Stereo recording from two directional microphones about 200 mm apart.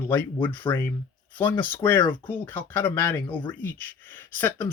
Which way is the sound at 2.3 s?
10° left (ahead or behind).